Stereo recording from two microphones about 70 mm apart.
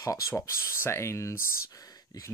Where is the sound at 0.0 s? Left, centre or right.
Left.